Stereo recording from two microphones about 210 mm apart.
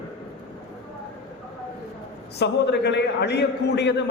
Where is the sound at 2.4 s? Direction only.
55° left (ahead or behind).